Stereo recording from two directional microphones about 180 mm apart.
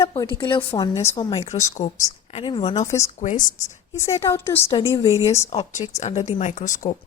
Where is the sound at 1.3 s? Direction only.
40° left (ahead or behind).